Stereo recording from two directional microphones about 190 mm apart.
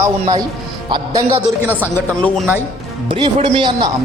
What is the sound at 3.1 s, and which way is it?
Speech, 30° right (ahead or behind).